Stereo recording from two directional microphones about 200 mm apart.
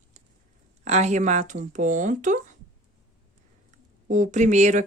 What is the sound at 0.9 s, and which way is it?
Speech, 35° right (ahead or behind).